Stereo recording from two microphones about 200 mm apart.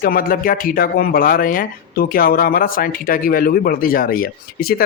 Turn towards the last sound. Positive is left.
turn(degrees=50)  # may be behind; listen again after turning